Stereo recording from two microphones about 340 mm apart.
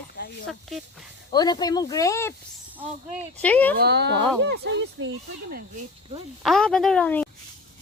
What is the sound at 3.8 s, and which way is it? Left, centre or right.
Speech, right.